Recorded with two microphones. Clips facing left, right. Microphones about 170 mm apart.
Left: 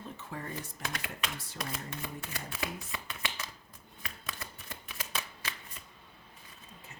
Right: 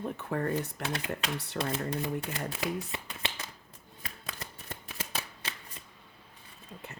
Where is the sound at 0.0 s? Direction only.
60° right (ahead or behind).